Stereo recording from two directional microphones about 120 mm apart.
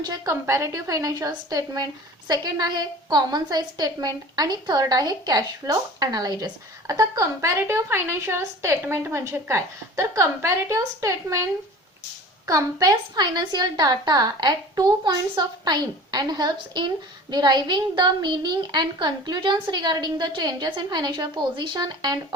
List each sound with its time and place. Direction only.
0.0 s a woman's voice: 30° right (ahead or behind)
12.5 s a woman's voice: 30° right (ahead or behind)